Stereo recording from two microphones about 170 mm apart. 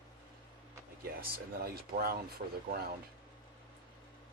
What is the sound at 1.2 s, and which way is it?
Speech, 60° right (ahead or behind).